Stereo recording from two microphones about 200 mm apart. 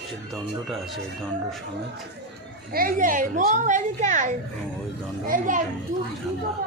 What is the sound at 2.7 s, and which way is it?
Speech, 45° right (ahead or behind).